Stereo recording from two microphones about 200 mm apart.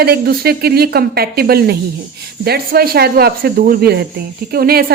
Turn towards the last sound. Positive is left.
turn(degrees=-50)  # may be behind; listen again after turning